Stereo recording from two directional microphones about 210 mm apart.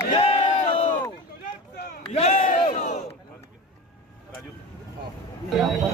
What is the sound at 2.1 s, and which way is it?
Battle cry, 35° left (ahead or behind).